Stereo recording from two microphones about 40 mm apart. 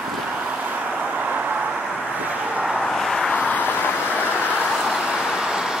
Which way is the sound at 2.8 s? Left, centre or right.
Centre.